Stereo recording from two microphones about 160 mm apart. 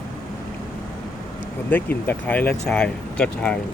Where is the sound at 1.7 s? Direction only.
10° left (ahead or behind).